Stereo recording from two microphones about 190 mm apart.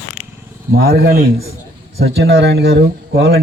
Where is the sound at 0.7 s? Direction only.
55° right (ahead or behind).